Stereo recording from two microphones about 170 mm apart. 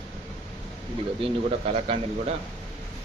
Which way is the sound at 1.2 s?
40° right (ahead or behind).